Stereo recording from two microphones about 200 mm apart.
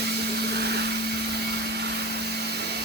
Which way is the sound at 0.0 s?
55° right (ahead or behind).